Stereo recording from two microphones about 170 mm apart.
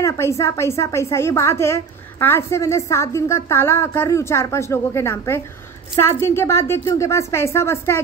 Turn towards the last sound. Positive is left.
turn(degrees=15)  # may be behind; listen again after turning